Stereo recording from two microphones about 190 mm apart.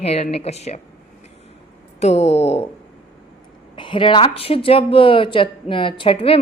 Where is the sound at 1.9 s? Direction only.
35° left (ahead or behind).